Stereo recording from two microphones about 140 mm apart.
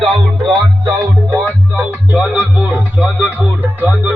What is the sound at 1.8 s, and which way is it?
Music, 10° right (ahead or behind).